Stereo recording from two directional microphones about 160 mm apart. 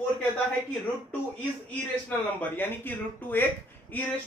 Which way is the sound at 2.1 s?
15° left (ahead or behind).